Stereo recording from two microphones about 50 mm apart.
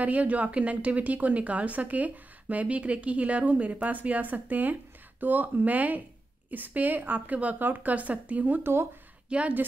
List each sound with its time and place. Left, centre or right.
0.0 s a woman's voice: right
9.3 s a woman's voice: right